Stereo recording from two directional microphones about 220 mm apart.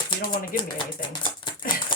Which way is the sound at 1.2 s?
20° left (ahead or behind).